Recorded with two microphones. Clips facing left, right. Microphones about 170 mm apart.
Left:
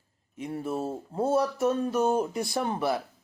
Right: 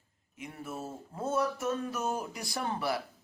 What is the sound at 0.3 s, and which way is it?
Speech, 30° left (ahead or behind).